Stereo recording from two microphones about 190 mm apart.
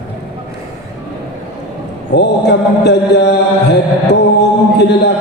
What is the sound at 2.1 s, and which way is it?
Mantra, 65° left (ahead or behind).